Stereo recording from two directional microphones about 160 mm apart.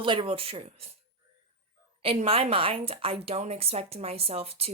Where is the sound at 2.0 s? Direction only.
35° right (ahead or behind).